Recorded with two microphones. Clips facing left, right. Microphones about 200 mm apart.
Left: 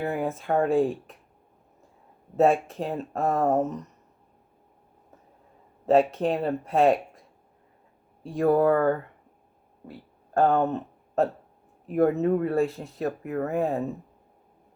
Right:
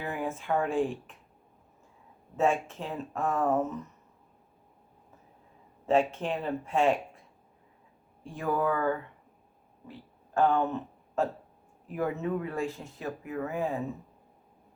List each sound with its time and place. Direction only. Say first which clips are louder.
0.0 s speech: left 6 dB; 40° left (ahead or behind)
2.3 s speech: left 6 dB; 35° left (ahead or behind)
5.8 s speech: left 5 dB; 35° left (ahead or behind)
8.2 s speech: left 9 dB; 35° left (ahead or behind)
8.6 s speech: left 7 dB; 50° left (ahead or behind)
10.3 s speech: left 4 dB; 50° left (ahead or behind)
13.1 s speech: left 5 dB; 55° left (ahead or behind)